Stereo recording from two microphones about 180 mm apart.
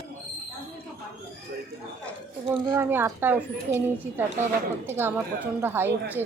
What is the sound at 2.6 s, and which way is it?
A woman's voice, 15° right (ahead or behind).